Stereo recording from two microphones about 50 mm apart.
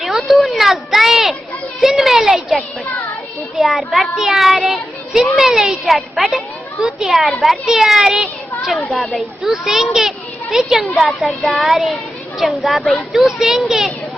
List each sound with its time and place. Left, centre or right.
0.0 s a sound: centre
1.8 s a child's voice: centre
10.8 s a child's voice: centre